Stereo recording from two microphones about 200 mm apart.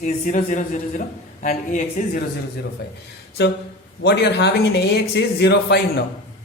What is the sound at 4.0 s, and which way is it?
A man's voice, 55° left (ahead or behind).